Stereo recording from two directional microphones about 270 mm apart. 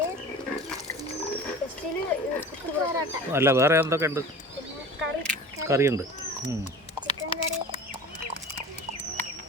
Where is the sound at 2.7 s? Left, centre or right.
Centre.